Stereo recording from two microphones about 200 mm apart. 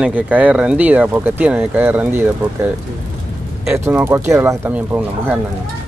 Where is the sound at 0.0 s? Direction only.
5° right (ahead or behind).